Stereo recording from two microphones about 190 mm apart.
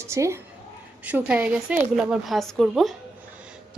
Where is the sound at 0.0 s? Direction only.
15° right (ahead or behind).